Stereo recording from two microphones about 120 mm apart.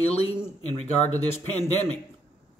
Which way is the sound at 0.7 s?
65° left (ahead or behind).